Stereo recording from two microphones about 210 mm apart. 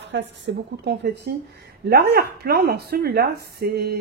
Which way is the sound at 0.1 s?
60° right (ahead or behind).